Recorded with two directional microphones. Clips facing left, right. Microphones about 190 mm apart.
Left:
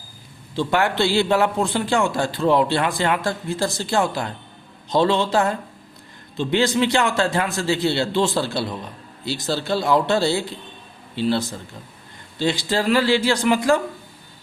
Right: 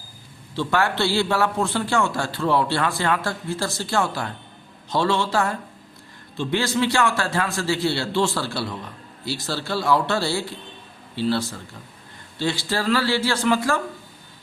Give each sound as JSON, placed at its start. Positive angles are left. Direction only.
{"t": 0.5, "sound": "a man's voice", "side_deg": 15}